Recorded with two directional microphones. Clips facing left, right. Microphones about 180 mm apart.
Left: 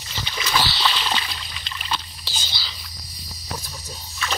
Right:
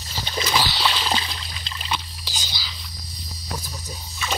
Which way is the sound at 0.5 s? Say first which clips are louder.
Left 1 dB; 10° right (ahead or behind).